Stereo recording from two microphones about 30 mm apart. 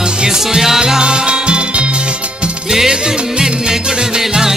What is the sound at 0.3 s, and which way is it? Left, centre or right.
Music, centre.